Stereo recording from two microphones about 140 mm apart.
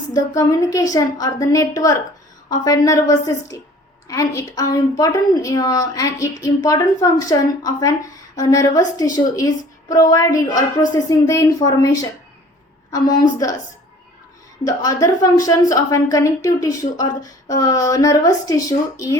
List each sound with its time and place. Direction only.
0.1 s a woman's voice: 25° left (ahead or behind)
14.6 s a woman's voice: 25° left (ahead or behind)